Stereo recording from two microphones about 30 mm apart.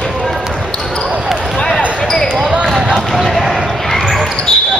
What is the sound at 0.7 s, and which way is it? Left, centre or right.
Basketball bounce, left.